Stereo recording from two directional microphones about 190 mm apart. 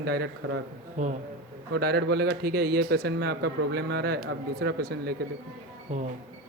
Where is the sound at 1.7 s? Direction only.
60° right (ahead or behind).